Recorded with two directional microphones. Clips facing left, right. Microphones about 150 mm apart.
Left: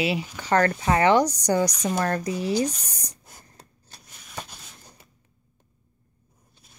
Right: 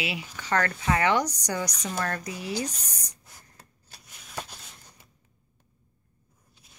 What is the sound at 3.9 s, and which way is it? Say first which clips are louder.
Shuffling cards: even; 5° right (ahead or behind).